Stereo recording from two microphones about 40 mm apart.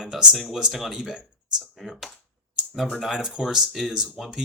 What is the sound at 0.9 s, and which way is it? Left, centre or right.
Speech, centre.